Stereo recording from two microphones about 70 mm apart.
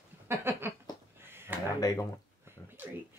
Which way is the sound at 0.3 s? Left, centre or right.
Right.